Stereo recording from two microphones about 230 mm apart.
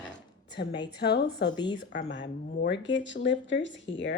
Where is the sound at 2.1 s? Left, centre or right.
Left.